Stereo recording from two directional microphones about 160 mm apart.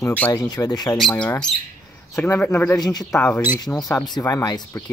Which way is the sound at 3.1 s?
5° left (ahead or behind).